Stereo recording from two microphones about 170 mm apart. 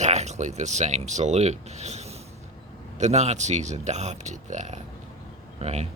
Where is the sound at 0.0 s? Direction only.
40° right (ahead or behind).